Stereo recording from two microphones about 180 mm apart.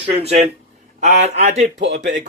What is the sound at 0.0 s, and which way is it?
Speech, 35° right (ahead or behind).